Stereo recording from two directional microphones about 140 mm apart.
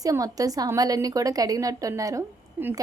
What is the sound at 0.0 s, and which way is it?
Speech, 25° right (ahead or behind).